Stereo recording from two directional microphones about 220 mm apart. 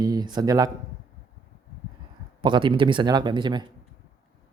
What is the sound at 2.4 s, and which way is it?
Speech, 20° right (ahead or behind).